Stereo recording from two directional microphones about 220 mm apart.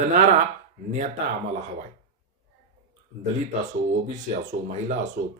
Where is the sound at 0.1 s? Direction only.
35° right (ahead or behind).